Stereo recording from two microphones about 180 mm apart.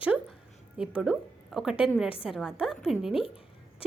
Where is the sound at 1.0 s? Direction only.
Centre (ahead or behind).